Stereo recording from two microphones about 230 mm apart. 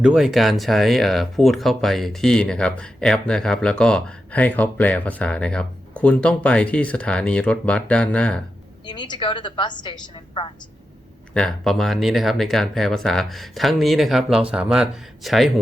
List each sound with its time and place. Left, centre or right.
0.0 s speech: centre
8.8 s a woman's voice: centre
11.3 s speech: centre